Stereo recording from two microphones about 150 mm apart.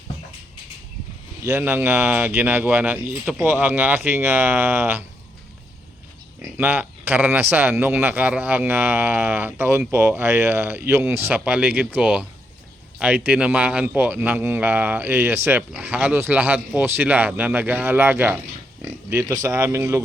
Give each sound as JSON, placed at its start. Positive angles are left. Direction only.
{"t": 1.5, "sound": "speech", "side_deg": -15}
{"t": 6.6, "sound": "speech", "side_deg": -10}